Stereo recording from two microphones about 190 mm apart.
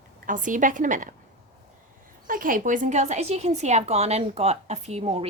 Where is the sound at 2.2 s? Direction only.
45° right (ahead or behind).